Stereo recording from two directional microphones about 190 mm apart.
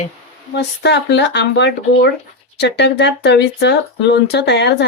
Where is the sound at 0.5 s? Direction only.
65° left (ahead or behind).